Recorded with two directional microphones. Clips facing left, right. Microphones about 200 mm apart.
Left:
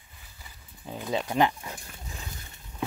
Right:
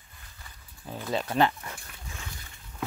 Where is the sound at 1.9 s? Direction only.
20° left (ahead or behind).